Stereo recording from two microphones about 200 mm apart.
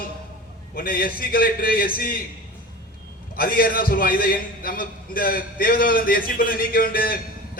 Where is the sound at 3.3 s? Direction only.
45° left (ahead or behind).